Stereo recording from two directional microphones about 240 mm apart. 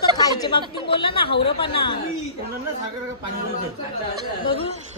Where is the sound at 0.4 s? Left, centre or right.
Centre.